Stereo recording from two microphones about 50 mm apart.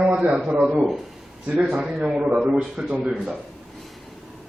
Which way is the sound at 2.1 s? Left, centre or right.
Centre.